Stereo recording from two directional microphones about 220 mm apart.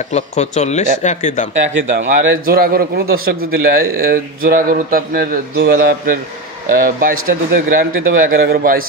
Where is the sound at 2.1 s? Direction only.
40° right (ahead or behind).